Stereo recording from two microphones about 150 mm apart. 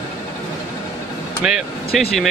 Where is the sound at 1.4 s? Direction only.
5° right (ahead or behind).